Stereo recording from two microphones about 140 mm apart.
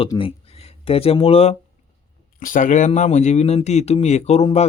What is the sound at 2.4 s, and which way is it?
A man's voice, 70° left (ahead or behind).